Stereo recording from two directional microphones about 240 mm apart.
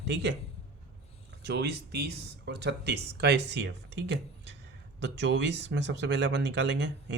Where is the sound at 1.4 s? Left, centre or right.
Right.